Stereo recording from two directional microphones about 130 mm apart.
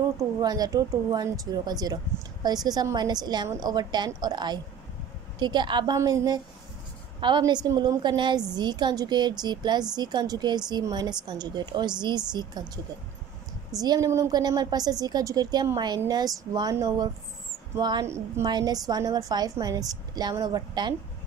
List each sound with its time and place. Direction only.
0.4 s a woman's voice: 30° right (ahead or behind)
18.0 s a woman's voice: 20° right (ahead or behind)